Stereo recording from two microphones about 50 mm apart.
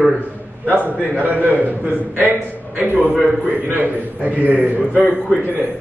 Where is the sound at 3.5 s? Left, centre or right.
Right.